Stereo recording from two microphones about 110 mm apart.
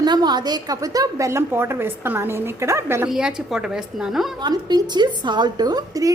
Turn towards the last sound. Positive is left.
turn(degrees=-35)  # may be behind; listen again after turning